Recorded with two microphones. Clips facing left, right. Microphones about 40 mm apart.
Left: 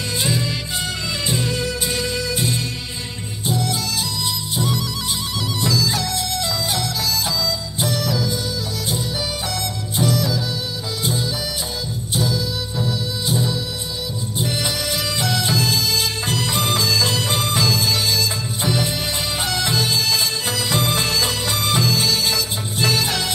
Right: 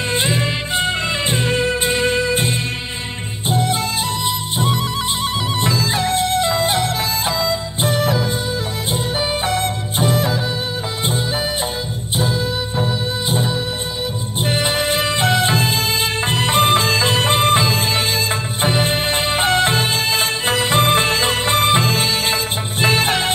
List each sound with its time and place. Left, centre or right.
0.1 s music: right
9.5 s music: right
12.2 s music: right